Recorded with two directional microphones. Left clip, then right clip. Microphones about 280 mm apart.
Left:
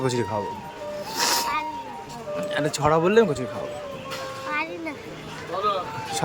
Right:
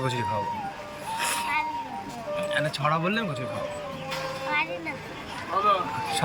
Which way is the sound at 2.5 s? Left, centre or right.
Centre.